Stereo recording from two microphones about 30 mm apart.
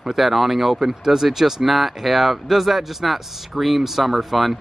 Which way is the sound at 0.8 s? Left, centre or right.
Centre.